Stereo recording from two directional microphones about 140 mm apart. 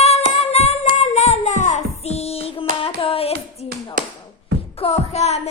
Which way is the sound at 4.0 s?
70° right (ahead or behind).